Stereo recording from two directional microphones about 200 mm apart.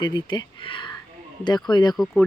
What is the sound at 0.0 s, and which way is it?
Speech, 20° left (ahead or behind).